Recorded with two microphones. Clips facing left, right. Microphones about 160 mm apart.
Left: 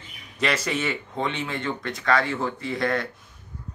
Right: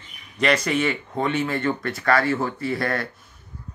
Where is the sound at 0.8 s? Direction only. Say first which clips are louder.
Right 4 dB; 5° right (ahead or behind).